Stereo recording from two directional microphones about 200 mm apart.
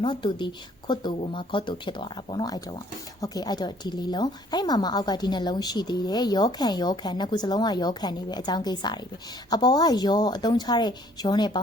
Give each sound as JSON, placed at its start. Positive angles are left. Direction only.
{"t": 0.0, "sound": "speech", "side_deg": 25}